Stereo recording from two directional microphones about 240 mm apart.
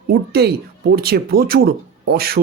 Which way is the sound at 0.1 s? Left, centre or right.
Right.